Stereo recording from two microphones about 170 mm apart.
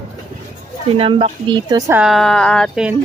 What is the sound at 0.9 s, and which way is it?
Speech, 35° right (ahead or behind).